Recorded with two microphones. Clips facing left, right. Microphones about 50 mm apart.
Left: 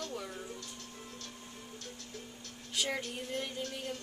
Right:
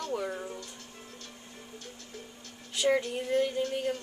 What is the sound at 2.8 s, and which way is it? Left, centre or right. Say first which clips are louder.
Speech: right 16 dB; centre.